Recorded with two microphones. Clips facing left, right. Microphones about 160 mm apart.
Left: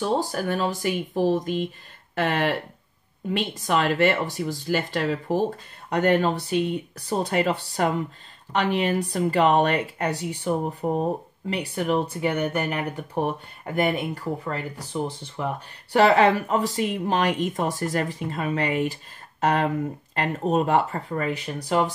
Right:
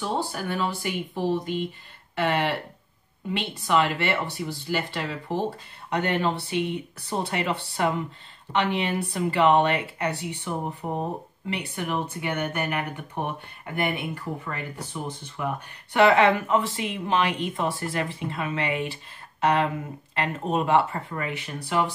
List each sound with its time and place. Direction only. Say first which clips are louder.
0.2 s speech: left 3 dB; 40° left (ahead or behind)
3.3 s speech: left 2 dB; 40° left (ahead or behind)